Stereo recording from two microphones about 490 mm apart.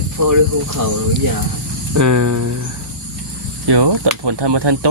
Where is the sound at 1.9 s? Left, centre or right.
Right.